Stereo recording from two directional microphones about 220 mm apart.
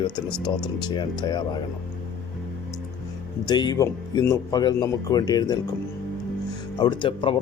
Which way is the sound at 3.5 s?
20° left (ahead or behind).